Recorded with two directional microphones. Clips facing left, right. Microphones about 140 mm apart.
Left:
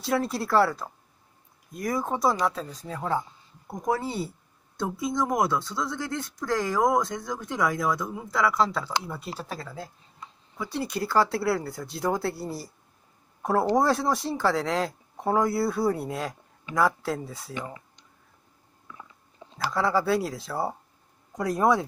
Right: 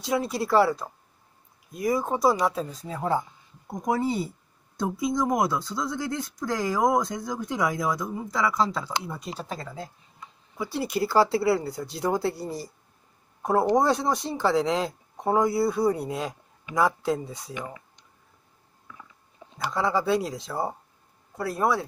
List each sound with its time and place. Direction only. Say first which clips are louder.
0.0 s speech: even; centre (ahead or behind); by 4.3 s 15° right (ahead or behind)
5.0 s speech: right 1 dB; centre (ahead or behind)
19.6 s speech: even; centre (ahead or behind)
21.4 s speech: left 2 dB; 20° left (ahead or behind)